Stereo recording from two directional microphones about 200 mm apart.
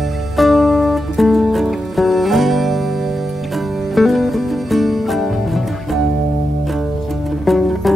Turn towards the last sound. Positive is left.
turn(degrees=0)  # may be behind; listen again after turning